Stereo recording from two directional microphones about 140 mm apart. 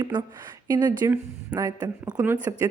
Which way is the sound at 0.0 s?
30° right (ahead or behind).